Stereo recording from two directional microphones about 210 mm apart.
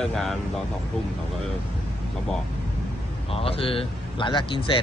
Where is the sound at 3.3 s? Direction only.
25° left (ahead or behind).